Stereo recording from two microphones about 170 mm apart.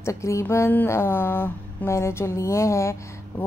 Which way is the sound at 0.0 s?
15° left (ahead or behind).